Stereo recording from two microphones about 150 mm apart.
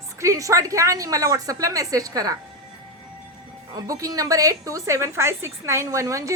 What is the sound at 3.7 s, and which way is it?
A woman's voice, 25° right (ahead or behind).